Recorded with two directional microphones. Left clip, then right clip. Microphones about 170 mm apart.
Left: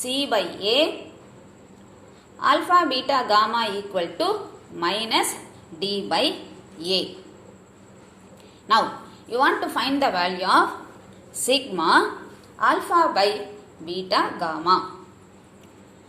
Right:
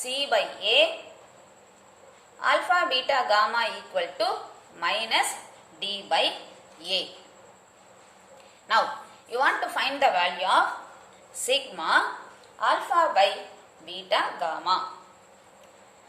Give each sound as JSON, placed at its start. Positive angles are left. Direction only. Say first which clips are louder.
{"t": 0.0, "sound": "a woman's voice", "louder": "left 2 dB", "side_deg": 20}
{"t": 2.4, "sound": "a woman's voice", "louder": "left 4 dB", "side_deg": 20}
{"t": 9.3, "sound": "a woman's voice", "louder": "left 4 dB", "side_deg": 15}